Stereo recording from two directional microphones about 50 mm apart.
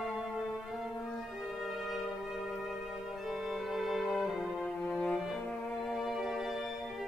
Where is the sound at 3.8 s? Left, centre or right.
Centre.